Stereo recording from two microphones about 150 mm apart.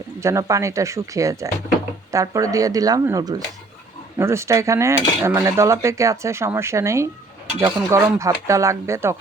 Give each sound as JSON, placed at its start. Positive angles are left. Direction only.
{"t": 0.2, "sound": "cutlery", "side_deg": -20}